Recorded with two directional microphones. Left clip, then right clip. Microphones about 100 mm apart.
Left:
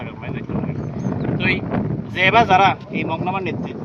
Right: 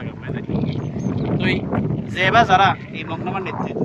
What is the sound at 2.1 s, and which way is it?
Speech, 65° right (ahead or behind).